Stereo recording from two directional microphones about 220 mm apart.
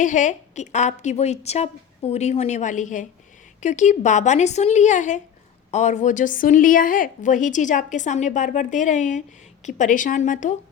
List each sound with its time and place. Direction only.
0.0 s a woman's voice: 35° left (ahead or behind)